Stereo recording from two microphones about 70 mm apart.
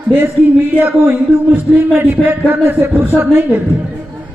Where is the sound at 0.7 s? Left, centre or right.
Right.